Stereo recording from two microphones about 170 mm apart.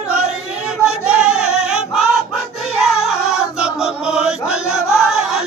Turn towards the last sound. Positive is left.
turn(degrees=-5)  # may be behind; listen again after turning